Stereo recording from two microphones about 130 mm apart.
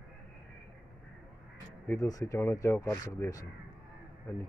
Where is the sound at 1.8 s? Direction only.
25° left (ahead or behind).